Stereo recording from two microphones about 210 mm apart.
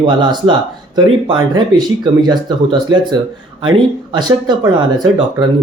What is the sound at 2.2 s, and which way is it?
Speech, 20° right (ahead or behind).